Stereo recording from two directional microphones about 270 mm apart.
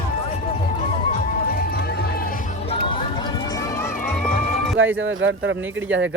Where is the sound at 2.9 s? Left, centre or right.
Centre.